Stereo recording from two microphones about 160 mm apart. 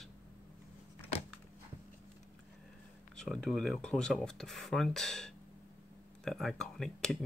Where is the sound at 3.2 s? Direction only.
Centre (ahead or behind).